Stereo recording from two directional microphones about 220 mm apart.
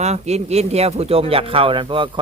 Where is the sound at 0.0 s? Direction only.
30° right (ahead or behind).